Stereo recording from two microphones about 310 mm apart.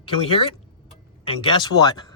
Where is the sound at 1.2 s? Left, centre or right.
Centre.